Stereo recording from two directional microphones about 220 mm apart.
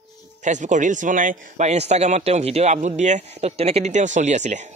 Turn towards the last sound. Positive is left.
turn(degrees=-30)  # may be behind; listen again after turning